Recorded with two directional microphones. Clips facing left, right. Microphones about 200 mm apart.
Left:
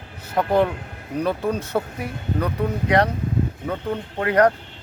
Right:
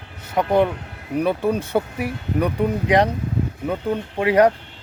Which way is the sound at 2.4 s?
15° right (ahead or behind).